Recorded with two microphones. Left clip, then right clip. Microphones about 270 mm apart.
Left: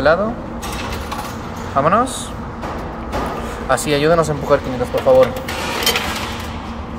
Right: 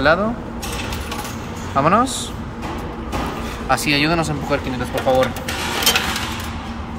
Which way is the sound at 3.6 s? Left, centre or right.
Centre.